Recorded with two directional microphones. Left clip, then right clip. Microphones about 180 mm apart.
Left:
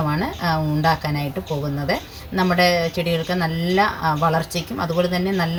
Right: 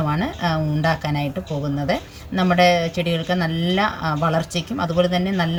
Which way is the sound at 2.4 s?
10° right (ahead or behind).